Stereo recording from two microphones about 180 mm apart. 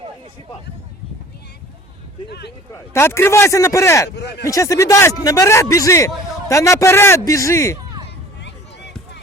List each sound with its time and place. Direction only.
2.7 s a man's voice: 15° left (ahead or behind)
4.1 s speech: 70° left (ahead or behind)
4.4 s a man's voice: 20° left (ahead or behind)